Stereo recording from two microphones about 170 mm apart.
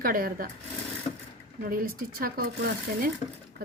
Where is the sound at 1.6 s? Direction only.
55° right (ahead or behind).